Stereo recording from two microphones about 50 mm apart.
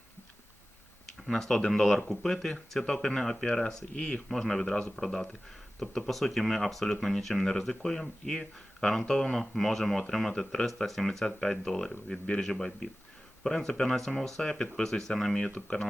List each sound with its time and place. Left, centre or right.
1.3 s speech: centre
3.9 s speech: left
4.3 s speech: centre